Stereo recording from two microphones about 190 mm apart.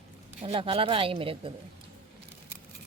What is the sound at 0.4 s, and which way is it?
A woman's voice, 30° right (ahead or behind).